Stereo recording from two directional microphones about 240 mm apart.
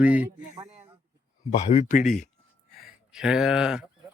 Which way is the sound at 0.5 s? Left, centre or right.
Right.